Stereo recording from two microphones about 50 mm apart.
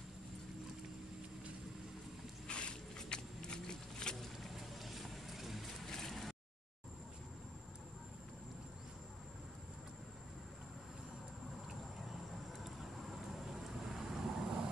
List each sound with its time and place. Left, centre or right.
2.4 s a sound: centre
4.4 s boat: centre
12.5 s vehicle: centre